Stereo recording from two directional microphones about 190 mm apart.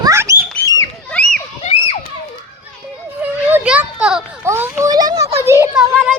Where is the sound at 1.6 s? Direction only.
30° left (ahead or behind).